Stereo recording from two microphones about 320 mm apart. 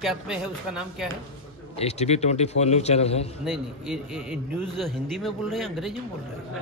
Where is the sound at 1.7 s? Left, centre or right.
Centre.